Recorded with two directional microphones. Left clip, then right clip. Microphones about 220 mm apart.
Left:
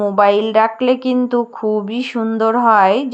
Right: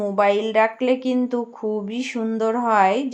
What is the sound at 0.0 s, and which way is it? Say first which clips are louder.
Speech: left 6 dB; 25° left (ahead or behind).